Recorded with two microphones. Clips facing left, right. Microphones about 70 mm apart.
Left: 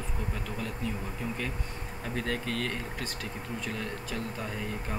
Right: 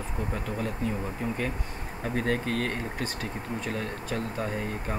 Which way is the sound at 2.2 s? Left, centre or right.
Right.